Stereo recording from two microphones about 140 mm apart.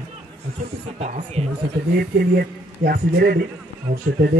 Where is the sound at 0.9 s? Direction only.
50° right (ahead or behind).